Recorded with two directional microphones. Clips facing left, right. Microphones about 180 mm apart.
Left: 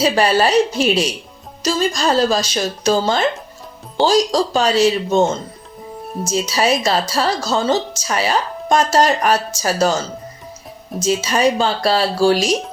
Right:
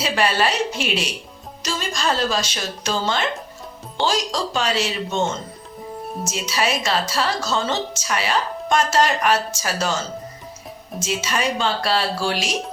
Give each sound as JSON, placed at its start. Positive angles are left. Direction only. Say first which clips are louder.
{"t": 0.0, "sound": "speech", "louder": "left 6 dB", "side_deg": 40}
{"t": 11.0, "sound": "speech", "louder": "left 8 dB", "side_deg": 40}